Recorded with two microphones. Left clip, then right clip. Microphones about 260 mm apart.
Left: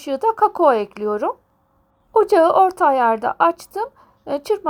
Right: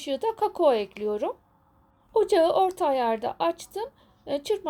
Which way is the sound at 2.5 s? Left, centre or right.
Centre.